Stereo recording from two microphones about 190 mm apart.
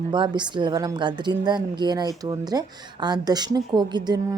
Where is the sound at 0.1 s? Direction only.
25° right (ahead or behind).